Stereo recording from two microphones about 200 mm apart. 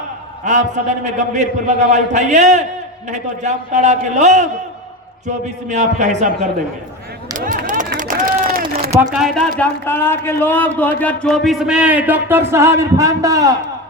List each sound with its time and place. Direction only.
0.4 s a man's voice: 35° right (ahead or behind)
5.6 s a man's voice: 35° right (ahead or behind)
7.3 s a sound: 40° right (ahead or behind)
7.9 s run: 40° right (ahead or behind)
9.1 s speech: centre (ahead or behind)
9.6 s speech: 10° left (ahead or behind); by 13.6 s 15° right (ahead or behind)